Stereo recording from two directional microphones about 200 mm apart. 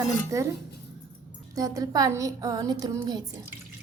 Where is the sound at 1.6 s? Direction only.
15° right (ahead or behind).